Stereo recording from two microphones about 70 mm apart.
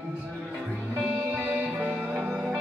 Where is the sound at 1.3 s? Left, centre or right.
Right.